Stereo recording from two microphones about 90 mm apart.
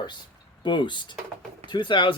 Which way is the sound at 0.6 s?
60° left (ahead or behind).